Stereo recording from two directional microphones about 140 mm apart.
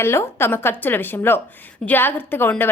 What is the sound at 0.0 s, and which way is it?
A woman's voice, 20° left (ahead or behind).